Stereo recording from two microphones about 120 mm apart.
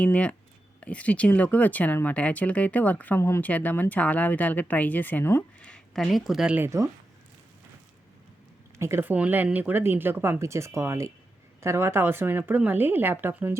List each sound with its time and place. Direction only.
0.0 s speech: 10° left (ahead or behind); by 6.7 s 10° right (ahead or behind)
6.7 s speech: 25° right (ahead or behind)
8.8 s speech: 20° right (ahead or behind)